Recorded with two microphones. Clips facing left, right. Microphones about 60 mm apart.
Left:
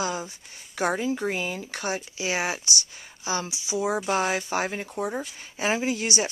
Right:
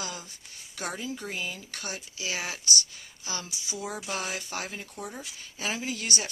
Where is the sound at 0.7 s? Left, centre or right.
Left.